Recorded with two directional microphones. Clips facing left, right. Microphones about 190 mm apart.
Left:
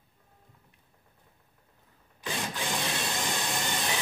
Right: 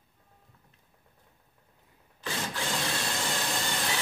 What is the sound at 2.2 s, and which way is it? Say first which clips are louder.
Wood: even; 15° left (ahead or behind).